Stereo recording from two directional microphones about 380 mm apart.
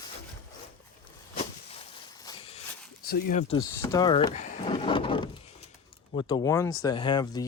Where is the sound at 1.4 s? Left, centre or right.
Centre.